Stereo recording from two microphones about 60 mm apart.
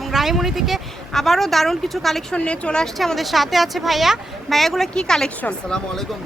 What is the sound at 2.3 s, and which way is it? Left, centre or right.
Speech, centre.